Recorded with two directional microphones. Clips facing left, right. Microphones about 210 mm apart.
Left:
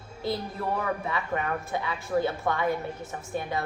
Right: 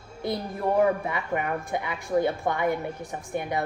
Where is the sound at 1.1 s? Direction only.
15° right (ahead or behind).